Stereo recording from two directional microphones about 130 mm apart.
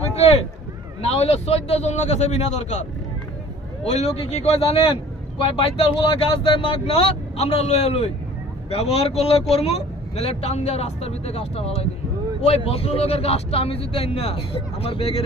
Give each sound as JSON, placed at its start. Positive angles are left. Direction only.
{"t": 1.1, "sound": "a man's voice", "side_deg": 55}
{"t": 3.8, "sound": "a man's voice", "side_deg": 60}